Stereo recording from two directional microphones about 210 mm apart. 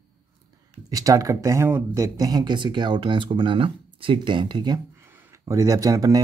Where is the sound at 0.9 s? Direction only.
15° right (ahead or behind).